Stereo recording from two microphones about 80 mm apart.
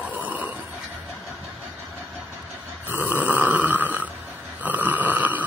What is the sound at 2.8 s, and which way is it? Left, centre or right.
Snoring, right.